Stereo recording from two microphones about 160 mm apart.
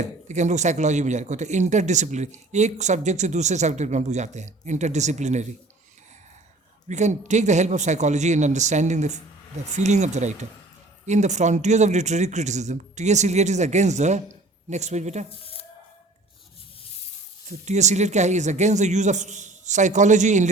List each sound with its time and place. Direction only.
0.0 s a man's voice: 45° right (ahead or behind)
6.8 s a man's voice: 45° right (ahead or behind)
15.4 s a sound: 35° left (ahead or behind)
17.7 s a man's voice: 45° right (ahead or behind)